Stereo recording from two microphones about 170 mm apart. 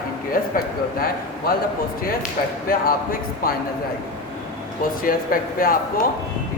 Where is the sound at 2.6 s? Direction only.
60° left (ahead or behind).